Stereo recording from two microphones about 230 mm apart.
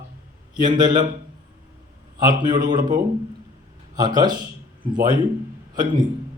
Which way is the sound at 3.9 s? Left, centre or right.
Centre.